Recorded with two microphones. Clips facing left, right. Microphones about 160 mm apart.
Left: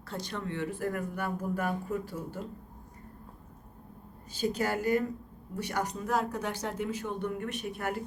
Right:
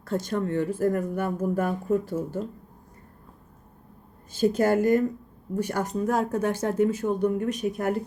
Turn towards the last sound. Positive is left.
turn(degrees=-40)  # may be behind; listen again after turning